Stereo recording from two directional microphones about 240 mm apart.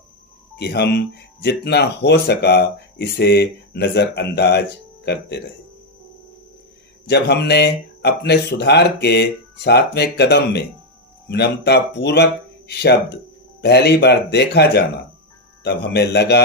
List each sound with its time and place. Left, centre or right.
0.6 s speech: left
7.1 s speech: left
13.6 s speech: left